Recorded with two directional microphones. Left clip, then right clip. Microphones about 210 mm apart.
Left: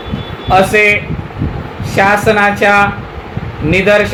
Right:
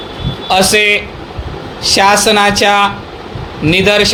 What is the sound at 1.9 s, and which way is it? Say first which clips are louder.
Speech: right 1 dB; 40° right (ahead or behind).